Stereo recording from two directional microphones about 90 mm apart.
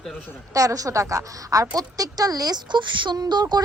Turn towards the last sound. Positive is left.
turn(degrees=-50)  # may be behind; listen again after turning